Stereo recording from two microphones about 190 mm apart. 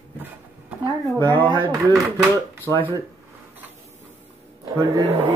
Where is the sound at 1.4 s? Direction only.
25° right (ahead or behind).